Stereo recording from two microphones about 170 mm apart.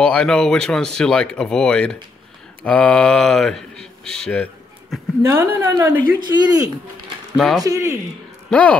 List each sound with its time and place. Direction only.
0.0 s speech: 5° left (ahead or behind)
5.2 s a woman's voice: 15° right (ahead or behind)
6.1 s speech: 25° right (ahead or behind)
7.3 s speech: centre (ahead or behind)
7.6 s a woman's voice: 15° right (ahead or behind)
8.5 s speech: 5° left (ahead or behind)